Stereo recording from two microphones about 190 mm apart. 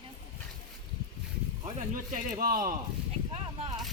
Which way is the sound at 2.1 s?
50° right (ahead or behind).